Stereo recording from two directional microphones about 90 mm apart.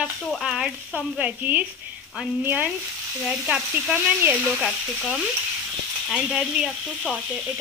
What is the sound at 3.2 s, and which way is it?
Speech, 5° right (ahead or behind).